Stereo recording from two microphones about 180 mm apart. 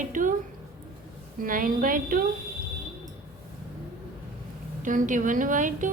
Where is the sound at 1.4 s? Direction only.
50° right (ahead or behind).